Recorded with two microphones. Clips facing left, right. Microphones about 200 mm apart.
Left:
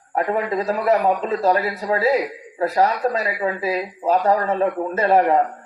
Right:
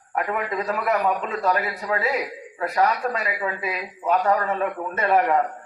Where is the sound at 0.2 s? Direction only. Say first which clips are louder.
Left 5 dB; 30° left (ahead or behind).